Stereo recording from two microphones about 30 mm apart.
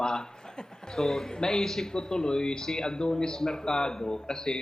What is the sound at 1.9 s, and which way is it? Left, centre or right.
Speech, left.